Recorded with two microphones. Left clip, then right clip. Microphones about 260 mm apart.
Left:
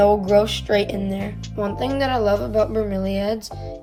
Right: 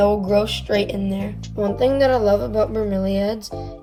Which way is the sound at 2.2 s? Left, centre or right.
Left.